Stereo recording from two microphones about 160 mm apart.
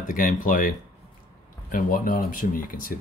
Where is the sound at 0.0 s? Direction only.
60° left (ahead or behind).